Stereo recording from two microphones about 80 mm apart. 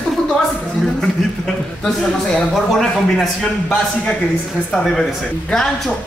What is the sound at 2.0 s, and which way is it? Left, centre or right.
A man's voice, centre.